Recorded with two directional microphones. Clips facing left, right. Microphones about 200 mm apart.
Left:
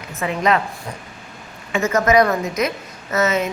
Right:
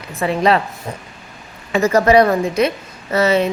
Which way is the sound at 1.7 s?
35° right (ahead or behind).